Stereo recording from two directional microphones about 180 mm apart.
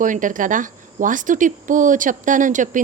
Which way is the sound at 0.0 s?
45° right (ahead or behind).